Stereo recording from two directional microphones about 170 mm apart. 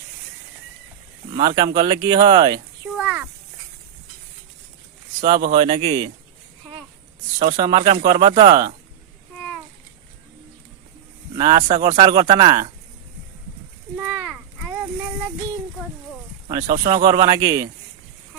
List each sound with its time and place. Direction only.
1.3 s speech: 25° right (ahead or behind)
3.0 s a sound: 10° right (ahead or behind)
5.5 s speech: 30° right (ahead or behind)
7.3 s speech: 35° right (ahead or behind)
11.3 s speech: 25° right (ahead or behind)
14.3 s a sound: 10° right (ahead or behind)
16.5 s speech: 20° right (ahead or behind)